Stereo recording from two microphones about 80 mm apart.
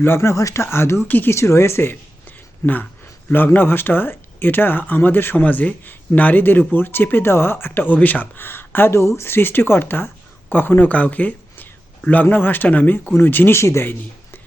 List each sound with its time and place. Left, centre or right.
0.0 s a man's voice: left
1.4 s speech: left
3.2 s a man's voice: left